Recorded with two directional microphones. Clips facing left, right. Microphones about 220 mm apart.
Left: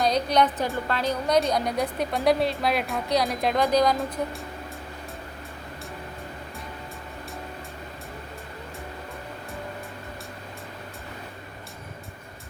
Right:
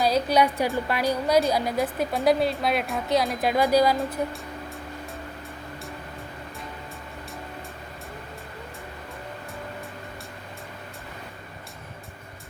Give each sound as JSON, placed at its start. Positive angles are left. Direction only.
{"t": 0.0, "sound": "a woman's voice", "side_deg": -5}